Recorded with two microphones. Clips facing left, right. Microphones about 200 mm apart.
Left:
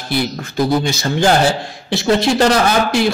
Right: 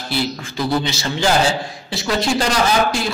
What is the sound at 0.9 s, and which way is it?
A man's voice, 50° left (ahead or behind).